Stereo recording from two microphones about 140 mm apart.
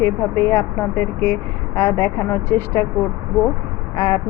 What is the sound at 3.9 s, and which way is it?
Speech, 20° left (ahead or behind).